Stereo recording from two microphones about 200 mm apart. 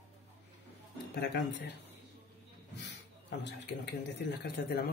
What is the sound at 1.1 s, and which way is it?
Speech, 55° left (ahead or behind).